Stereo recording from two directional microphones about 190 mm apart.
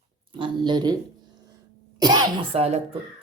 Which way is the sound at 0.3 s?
25° right (ahead or behind).